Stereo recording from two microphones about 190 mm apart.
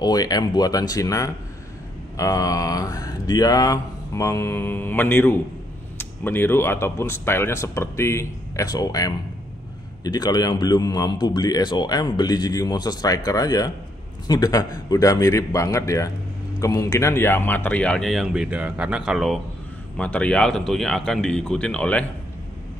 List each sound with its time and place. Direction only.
0.0 s a man's voice: 20° left (ahead or behind)